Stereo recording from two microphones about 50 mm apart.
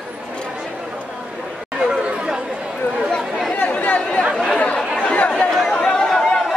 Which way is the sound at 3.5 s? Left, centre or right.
Left.